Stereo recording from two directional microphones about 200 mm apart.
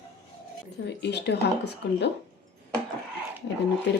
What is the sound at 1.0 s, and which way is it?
Speech, 55° left (ahead or behind).